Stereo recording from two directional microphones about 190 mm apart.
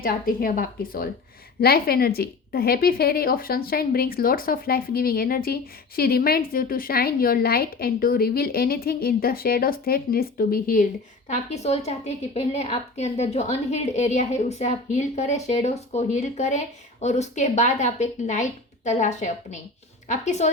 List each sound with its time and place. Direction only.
0.0 s a woman's voice: 50° left (ahead or behind)
11.3 s a woman's voice: 35° left (ahead or behind)